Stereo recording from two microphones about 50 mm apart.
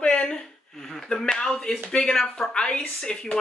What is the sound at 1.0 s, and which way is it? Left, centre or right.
A woman's voice, centre.